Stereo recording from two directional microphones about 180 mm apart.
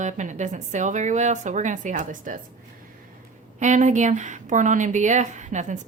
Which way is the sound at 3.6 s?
40° right (ahead or behind).